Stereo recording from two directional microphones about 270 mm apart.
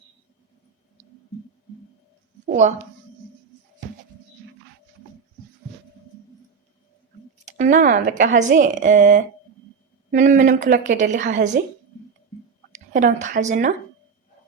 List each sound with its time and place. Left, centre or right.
2.5 s a woman's voice: right
7.4 s a woman's voice: right
12.9 s a woman's voice: right